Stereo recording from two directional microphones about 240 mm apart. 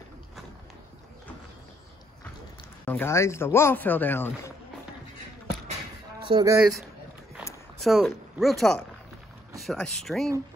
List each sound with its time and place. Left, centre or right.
2.8 s speech: centre
6.2 s speech: centre
7.8 s speech: centre